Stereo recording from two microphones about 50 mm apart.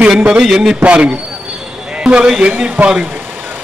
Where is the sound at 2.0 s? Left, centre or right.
Right.